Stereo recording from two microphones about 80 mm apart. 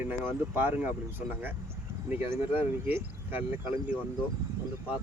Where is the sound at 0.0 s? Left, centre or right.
Right.